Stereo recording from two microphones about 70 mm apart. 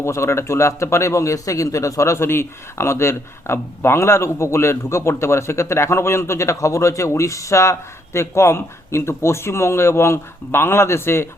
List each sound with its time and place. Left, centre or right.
0.0 s a man's voice: left